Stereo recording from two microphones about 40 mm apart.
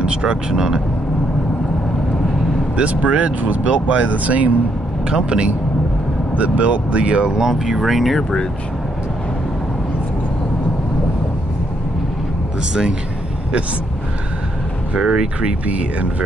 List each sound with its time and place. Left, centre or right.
0.0 s speech: right
2.8 s speech: right
5.1 s speech: right; by 8.2 s centre
8.2 s speech: centre
15.0 s speech: centre
15.6 s speech: right